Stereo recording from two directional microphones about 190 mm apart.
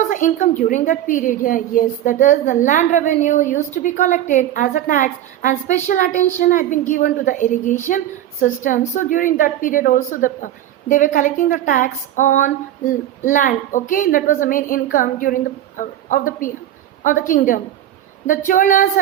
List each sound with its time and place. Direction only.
0.1 s a woman's voice: 40° left (ahead or behind)